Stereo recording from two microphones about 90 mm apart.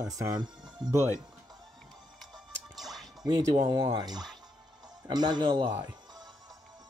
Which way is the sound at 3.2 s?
45° right (ahead or behind).